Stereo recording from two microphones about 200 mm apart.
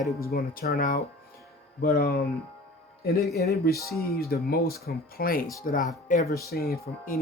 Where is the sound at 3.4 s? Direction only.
55° left (ahead or behind).